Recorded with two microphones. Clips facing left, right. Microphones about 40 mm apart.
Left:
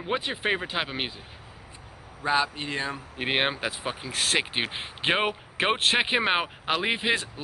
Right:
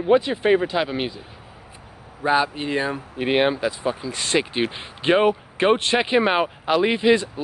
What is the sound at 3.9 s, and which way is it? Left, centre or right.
Speech, left.